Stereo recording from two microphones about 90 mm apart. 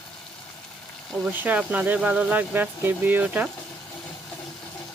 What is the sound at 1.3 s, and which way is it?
Speech, 20° right (ahead or behind).